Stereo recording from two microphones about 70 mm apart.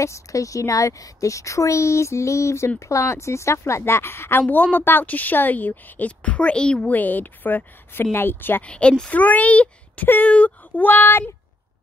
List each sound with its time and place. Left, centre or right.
0.0 s a woman's voice: left; by 6.9 s centre
6.9 s a woman's voice: left
8.6 s a woman's voice: centre